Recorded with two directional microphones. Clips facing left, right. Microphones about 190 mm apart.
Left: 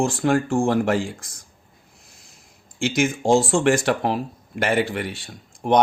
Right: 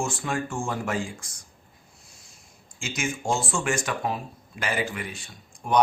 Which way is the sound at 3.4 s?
70° left (ahead or behind).